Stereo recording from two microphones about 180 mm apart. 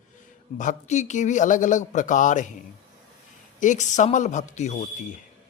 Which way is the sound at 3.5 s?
45° left (ahead or behind).